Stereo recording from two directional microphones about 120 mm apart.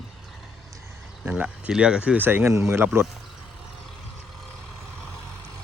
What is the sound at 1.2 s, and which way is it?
Speech, 10° right (ahead or behind).